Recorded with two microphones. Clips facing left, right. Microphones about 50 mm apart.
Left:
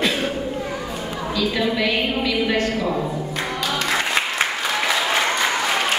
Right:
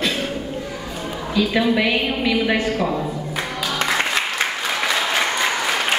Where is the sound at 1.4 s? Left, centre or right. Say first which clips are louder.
Right 4 dB; centre.